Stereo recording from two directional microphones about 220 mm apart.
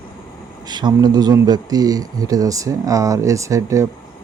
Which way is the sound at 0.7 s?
20° right (ahead or behind).